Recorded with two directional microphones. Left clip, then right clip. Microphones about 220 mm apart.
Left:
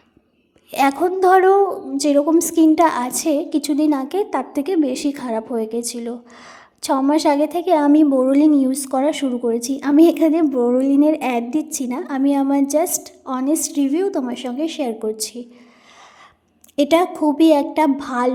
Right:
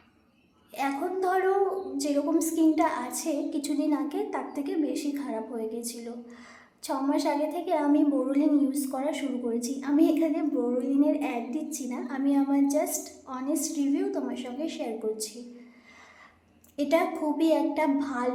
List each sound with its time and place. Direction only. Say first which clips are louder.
0.7 s a woman's voice: left 13 dB; 45° left (ahead or behind)
16.7 s a woman's voice: left 10 dB; 40° left (ahead or behind)